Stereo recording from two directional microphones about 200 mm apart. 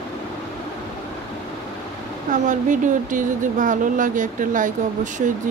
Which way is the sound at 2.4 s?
40° right (ahead or behind).